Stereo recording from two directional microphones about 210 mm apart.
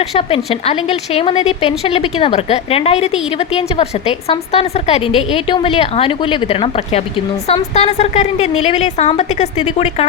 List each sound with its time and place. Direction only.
0.0 s a woman's voice: 30° left (ahead or behind)